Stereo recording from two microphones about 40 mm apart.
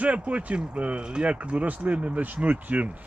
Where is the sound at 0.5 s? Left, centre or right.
Right.